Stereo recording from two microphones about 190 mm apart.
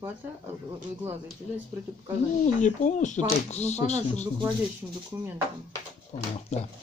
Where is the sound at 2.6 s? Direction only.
40° left (ahead or behind).